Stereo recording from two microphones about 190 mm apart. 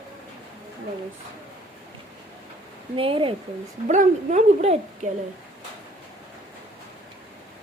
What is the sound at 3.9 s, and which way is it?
Speech, 40° right (ahead or behind).